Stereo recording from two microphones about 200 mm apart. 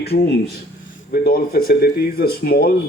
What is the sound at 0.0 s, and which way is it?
Speech, 55° left (ahead or behind).